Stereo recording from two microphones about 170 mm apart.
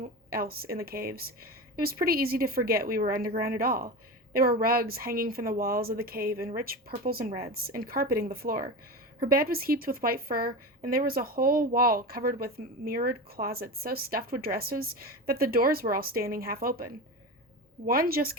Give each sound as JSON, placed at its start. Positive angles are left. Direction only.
{"t": 0.0, "sound": "speech", "side_deg": -60}